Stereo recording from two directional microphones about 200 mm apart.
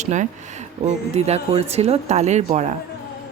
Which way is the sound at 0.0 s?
35° right (ahead or behind).